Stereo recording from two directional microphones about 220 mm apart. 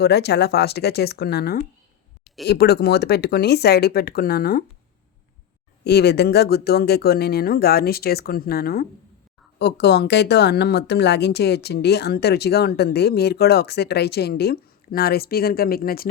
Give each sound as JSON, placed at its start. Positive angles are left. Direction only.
{"t": 0.0, "sound": "speech", "side_deg": 50}
{"t": 5.8, "sound": "speech", "side_deg": 50}